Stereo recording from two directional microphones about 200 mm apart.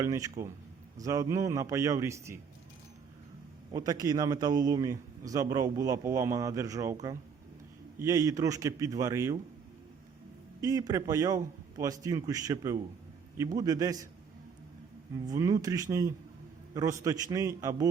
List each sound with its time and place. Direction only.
0.0 s a man's voice: 15° right (ahead or behind)
3.7 s a man's voice: 20° right (ahead or behind)
8.0 s a man's voice: 15° right (ahead or behind)
10.6 s a man's voice: 20° right (ahead or behind)
15.1 s a man's voice: 15° right (ahead or behind)